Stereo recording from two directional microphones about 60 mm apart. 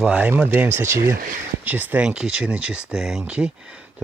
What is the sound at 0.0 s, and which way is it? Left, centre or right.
Speech, centre.